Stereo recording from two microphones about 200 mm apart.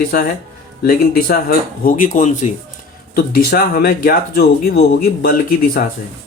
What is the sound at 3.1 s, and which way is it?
Speech, 50° left (ahead or behind).